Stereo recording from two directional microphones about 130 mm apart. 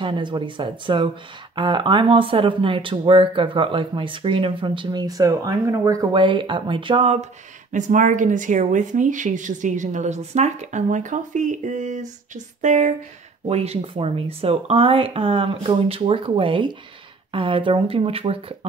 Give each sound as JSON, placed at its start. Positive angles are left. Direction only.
{"t": 0.0, "sound": "speech", "side_deg": -40}
{"t": 6.1, "sound": "speech", "side_deg": -40}
{"t": 7.7, "sound": "speech", "side_deg": -75}
{"t": 13.5, "sound": "speech", "side_deg": -55}